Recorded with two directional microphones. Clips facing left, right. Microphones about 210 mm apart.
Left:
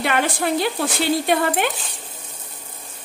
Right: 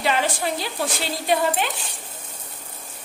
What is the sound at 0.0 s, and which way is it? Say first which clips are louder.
A woman's voice: left 2 dB; 60° left (ahead or behind).